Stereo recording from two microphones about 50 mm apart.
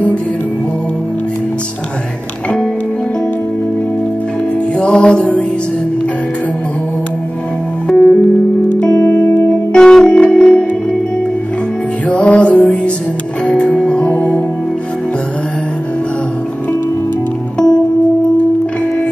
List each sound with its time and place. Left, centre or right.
4.7 s music: left
7.9 s music: left
9.7 s music: centre
12.1 s music: left